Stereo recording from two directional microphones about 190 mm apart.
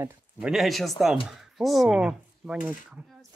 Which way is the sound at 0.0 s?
5° right (ahead or behind).